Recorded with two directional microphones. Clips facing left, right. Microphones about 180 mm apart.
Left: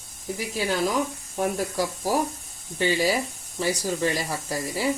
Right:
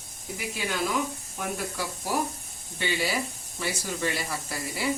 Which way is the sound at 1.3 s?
40° left (ahead or behind).